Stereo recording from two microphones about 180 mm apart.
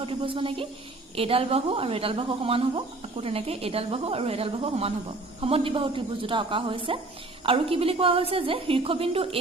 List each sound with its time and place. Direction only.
0.0 s a woman's voice: 30° right (ahead or behind)